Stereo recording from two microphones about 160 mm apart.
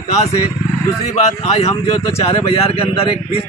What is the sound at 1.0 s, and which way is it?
Speech, 45° left (ahead or behind).